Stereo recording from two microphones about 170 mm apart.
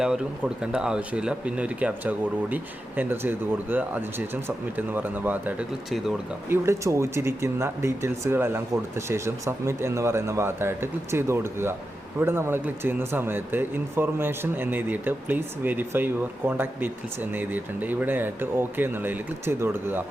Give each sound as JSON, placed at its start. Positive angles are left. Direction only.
{"t": 0.0, "sound": "speech", "side_deg": -5}
{"t": 6.5, "sound": "speech", "side_deg": -15}